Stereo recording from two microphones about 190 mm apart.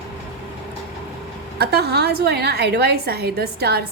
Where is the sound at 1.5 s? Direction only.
60° right (ahead or behind).